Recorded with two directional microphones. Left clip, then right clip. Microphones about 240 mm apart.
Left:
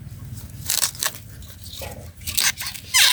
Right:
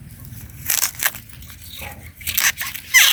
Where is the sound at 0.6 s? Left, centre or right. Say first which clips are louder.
Right 2 dB; centre.